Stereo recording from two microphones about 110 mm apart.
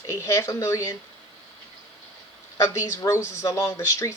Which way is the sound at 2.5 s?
25° left (ahead or behind).